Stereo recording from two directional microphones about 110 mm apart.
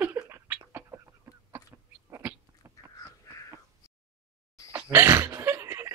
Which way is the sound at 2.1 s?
25° right (ahead or behind).